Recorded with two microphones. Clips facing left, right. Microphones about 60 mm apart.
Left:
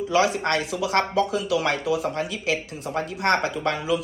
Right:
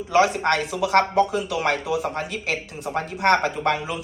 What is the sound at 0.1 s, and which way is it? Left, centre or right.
Speech, right.